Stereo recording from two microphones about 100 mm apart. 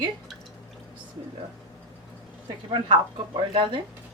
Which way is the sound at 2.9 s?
55° right (ahead or behind).